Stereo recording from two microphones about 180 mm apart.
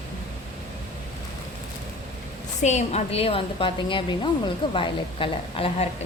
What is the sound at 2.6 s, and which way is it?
A woman's voice, 40° left (ahead or behind).